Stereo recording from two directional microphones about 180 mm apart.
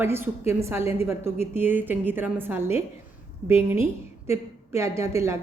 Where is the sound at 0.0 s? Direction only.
15° right (ahead or behind).